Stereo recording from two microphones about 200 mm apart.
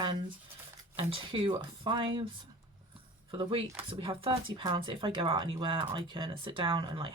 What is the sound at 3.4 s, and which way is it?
Speech, 25° right (ahead or behind).